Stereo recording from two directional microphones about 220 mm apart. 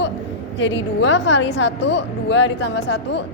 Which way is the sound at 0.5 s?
55° left (ahead or behind).